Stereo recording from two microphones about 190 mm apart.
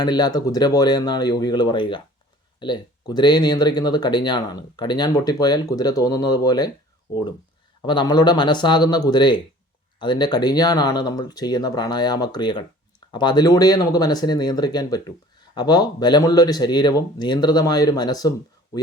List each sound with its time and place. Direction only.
0.0 s speech: 20° left (ahead or behind)
7.8 s speech: 20° left (ahead or behind)